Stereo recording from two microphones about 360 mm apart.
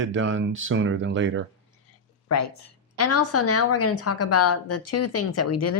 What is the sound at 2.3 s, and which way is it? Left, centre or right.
A woman's voice, left.